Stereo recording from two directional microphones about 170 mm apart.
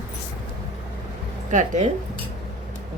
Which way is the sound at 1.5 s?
45° right (ahead or behind).